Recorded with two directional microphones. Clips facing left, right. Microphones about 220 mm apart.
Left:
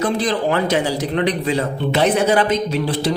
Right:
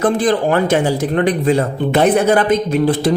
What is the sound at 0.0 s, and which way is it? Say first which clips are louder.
A man's voice: right 4 dB; 50° right (ahead or behind).